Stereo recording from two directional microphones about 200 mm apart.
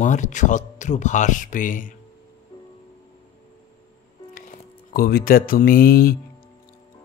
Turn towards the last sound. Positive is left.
turn(degrees=45)  # may be behind; listen again after turning